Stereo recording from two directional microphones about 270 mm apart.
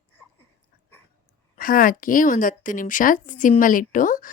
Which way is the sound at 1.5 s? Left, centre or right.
Left.